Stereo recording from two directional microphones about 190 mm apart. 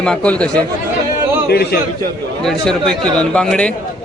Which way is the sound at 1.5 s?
55° left (ahead or behind).